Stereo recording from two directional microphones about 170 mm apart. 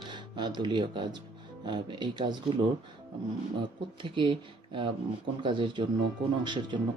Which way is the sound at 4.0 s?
30° right (ahead or behind).